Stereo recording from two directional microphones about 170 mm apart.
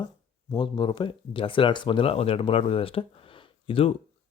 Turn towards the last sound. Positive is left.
turn(degrees=30)  # may be behind; listen again after turning